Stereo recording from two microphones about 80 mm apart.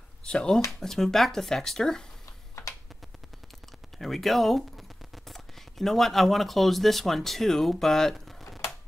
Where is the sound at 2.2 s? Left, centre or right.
Left.